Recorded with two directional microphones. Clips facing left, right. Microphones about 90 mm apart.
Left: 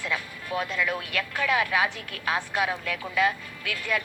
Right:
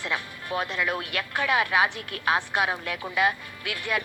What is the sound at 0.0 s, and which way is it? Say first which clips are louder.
A woman's voice: even; 20° right (ahead or behind).